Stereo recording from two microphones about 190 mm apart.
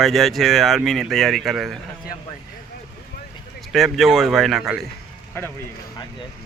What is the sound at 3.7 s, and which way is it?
Speech, centre (ahead or behind).